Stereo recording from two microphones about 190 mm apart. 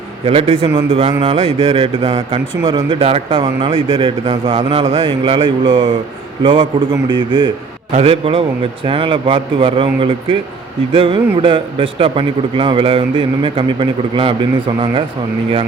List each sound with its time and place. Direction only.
0.3 s a man's voice: 35° right (ahead or behind)